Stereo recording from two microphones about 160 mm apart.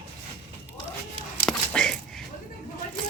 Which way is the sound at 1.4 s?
5° left (ahead or behind).